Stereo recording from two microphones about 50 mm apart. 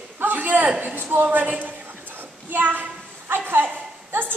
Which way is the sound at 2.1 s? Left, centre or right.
Right.